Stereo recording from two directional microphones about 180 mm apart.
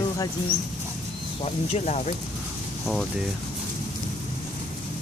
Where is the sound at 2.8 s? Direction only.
Centre (ahead or behind).